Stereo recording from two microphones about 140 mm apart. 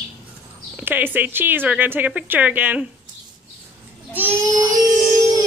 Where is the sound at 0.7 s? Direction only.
15° right (ahead or behind).